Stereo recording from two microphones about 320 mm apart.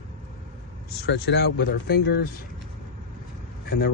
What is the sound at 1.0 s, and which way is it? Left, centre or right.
Speech, left.